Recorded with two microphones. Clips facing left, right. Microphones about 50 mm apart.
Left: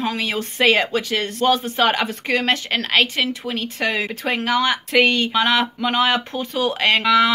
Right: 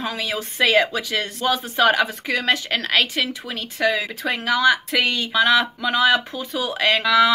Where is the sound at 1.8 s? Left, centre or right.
Left.